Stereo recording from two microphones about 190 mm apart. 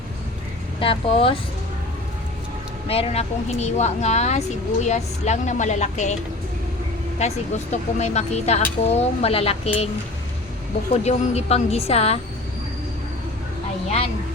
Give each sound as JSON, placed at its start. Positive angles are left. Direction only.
{"t": 0.8, "sound": "speech", "side_deg": 30}
{"t": 2.8, "sound": "speech", "side_deg": 30}
{"t": 7.2, "sound": "speech", "side_deg": 35}
{"t": 11.0, "sound": "speech", "side_deg": 35}